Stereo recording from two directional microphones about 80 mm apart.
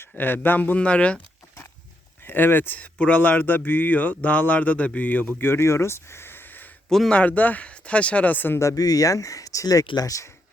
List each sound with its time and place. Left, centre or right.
0.4 s speech: left
2.2 s speech: left
8.5 s speech: left